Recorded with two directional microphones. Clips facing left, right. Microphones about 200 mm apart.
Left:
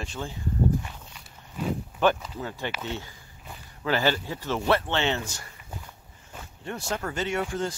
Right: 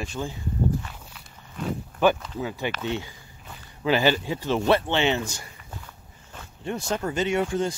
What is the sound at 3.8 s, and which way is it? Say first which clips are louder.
Speech: right 4 dB; 15° right (ahead or behind).